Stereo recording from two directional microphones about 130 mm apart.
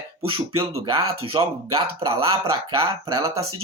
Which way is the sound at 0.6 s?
45° right (ahead or behind).